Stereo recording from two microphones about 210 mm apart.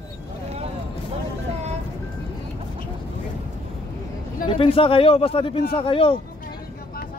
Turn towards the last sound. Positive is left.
turn(degrees=25)  # may be behind; listen again after turning